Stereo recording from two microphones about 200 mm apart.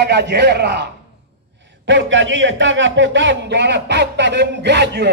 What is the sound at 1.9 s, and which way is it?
A man's voice, 65° right (ahead or behind).